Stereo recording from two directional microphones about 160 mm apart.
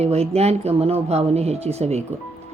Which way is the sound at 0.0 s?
40° right (ahead or behind).